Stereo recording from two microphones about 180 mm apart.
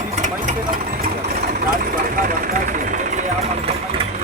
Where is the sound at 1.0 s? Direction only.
50° right (ahead or behind).